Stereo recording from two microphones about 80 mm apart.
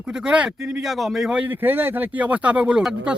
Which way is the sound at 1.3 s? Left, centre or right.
Centre.